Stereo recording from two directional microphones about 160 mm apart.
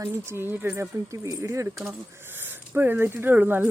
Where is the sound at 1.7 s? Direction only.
5° right (ahead or behind).